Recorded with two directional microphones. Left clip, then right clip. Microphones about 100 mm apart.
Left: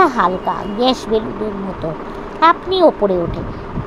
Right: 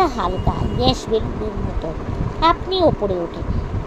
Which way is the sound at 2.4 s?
35° left (ahead or behind).